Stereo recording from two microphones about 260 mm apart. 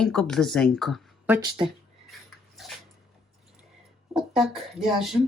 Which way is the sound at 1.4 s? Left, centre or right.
Centre.